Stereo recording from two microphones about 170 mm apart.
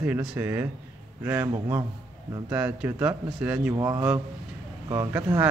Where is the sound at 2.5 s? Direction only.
10° right (ahead or behind).